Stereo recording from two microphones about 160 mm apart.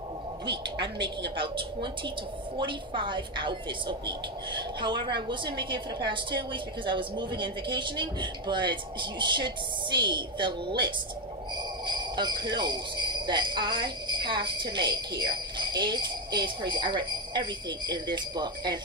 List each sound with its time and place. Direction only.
0.5 s a woman's voice: 30° right (ahead or behind)
11.8 s speech: 30° right (ahead or behind)